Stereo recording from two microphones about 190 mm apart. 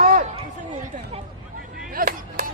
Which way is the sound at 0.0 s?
50° right (ahead or behind).